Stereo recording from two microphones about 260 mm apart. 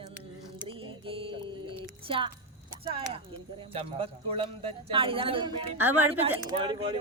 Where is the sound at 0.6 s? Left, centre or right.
Right.